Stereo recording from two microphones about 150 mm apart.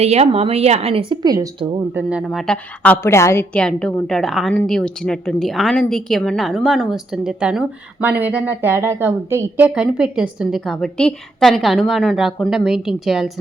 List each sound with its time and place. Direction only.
0.0 s speech: 45° right (ahead or behind)
1.2 s speech: 25° right (ahead or behind)
1.9 s a woman's voice: 10° right (ahead or behind); by 3.4 s 15° left (ahead or behind)
3.5 s a woman's voice: 5° left (ahead or behind)